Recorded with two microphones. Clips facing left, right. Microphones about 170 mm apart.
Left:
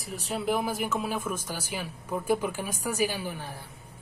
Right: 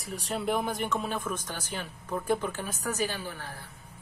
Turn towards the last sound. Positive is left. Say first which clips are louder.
# left 3 dB
turn(degrees=15)  # may be behind; listen again after turning